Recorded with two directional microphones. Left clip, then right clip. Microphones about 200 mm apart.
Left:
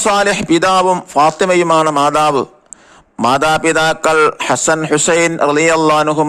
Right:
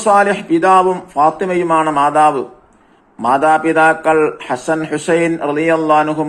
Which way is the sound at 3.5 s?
55° left (ahead or behind).